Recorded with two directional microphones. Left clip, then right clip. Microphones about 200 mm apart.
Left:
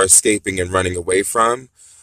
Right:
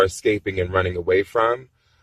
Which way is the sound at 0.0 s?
45° left (ahead or behind).